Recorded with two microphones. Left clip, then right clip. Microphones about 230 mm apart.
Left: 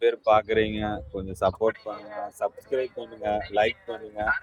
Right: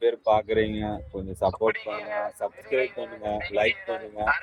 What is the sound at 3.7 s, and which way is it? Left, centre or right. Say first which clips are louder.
Speech: right 5 dB; right.